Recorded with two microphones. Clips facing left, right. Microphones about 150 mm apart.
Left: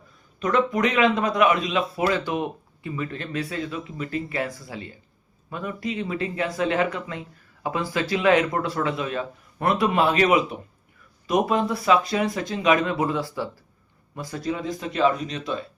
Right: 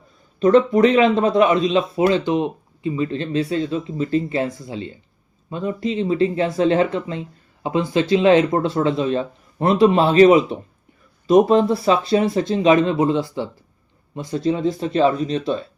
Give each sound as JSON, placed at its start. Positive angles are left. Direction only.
{"t": 0.3, "sound": "a man's voice", "side_deg": -30}